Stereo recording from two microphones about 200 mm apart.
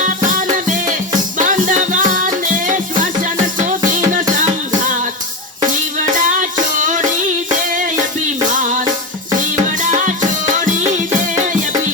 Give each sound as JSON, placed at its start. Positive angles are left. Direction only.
{"t": 0.0, "sound": "music", "side_deg": -40}
{"t": 6.1, "sound": "music", "side_deg": -40}
{"t": 9.9, "sound": "music", "side_deg": -40}